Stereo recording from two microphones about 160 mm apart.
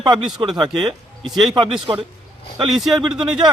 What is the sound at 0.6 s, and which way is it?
Speech, 30° right (ahead or behind).